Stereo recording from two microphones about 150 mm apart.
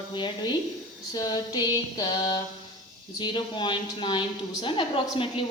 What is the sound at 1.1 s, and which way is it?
Female singing, 25° left (ahead or behind).